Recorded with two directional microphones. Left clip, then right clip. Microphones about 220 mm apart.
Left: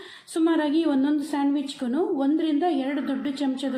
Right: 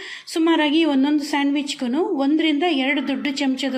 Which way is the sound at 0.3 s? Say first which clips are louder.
Right 5 dB; 25° right (ahead or behind).